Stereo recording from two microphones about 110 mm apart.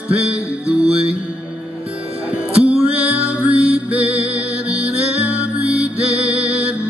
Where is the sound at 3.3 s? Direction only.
10° right (ahead or behind).